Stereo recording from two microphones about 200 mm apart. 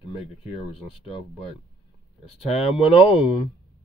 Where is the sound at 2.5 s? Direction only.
30° left (ahead or behind).